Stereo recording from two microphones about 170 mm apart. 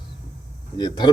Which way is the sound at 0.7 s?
25° left (ahead or behind).